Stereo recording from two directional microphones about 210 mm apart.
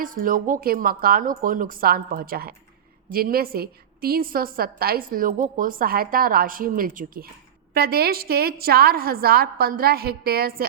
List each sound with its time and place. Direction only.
0.0 s a woman's voice: 40° right (ahead or behind)